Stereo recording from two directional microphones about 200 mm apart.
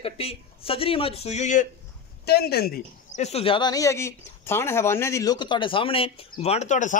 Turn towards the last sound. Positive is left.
turn(degrees=40)  # may be behind; listen again after turning